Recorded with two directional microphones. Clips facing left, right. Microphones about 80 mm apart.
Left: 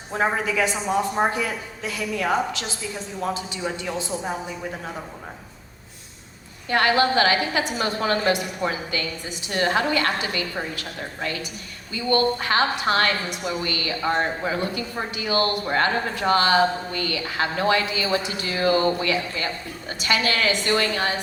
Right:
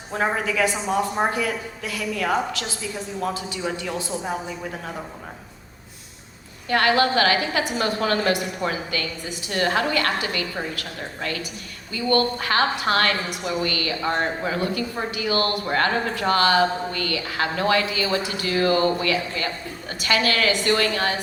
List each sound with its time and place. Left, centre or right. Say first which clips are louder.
0.2 s a woman's voice: even; left
6.7 s a woman's voice: even; left